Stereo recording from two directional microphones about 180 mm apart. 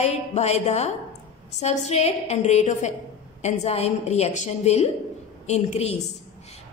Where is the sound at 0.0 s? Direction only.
35° left (ahead or behind).